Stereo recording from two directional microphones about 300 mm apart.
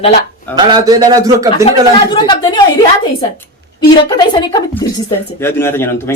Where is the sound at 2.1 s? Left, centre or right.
Centre.